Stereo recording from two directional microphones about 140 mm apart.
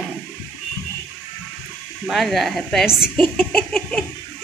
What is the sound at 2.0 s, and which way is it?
Child singing, centre (ahead or behind).